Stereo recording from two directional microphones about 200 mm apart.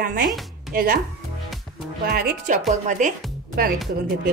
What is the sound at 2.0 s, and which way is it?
Speech, 45° right (ahead or behind).